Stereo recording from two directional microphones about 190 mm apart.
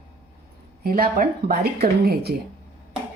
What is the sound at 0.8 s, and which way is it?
Speech, 50° right (ahead or behind).